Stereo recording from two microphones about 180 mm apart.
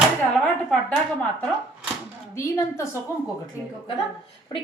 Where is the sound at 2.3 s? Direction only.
15° left (ahead or behind).